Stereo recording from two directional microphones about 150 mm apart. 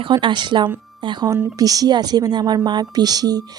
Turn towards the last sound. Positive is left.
turn(degrees=-25)  # may be behind; listen again after turning